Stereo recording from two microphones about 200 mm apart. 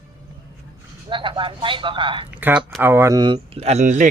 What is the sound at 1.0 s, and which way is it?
Speech, 25° right (ahead or behind).